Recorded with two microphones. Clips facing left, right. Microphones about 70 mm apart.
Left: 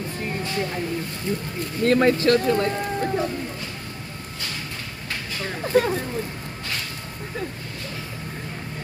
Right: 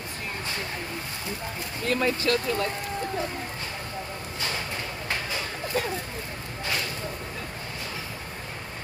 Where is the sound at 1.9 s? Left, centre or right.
Left.